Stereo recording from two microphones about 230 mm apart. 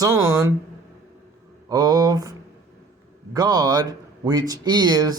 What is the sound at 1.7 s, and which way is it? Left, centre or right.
Speech, centre.